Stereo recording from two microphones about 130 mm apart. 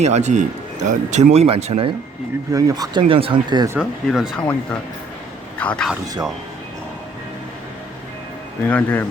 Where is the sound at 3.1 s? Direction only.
45° right (ahead or behind).